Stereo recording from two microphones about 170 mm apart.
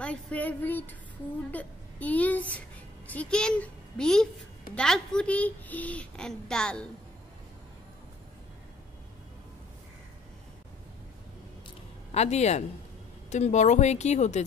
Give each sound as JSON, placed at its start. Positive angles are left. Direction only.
{"t": 0.0, "sound": "a woman's voice", "side_deg": 5}
{"t": 12.1, "sound": "a woman's voice", "side_deg": 40}